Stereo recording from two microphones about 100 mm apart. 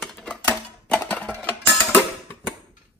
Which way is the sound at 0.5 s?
15° left (ahead or behind).